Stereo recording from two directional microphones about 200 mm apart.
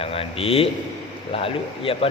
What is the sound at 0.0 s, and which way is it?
A man's voice, 30° left (ahead or behind).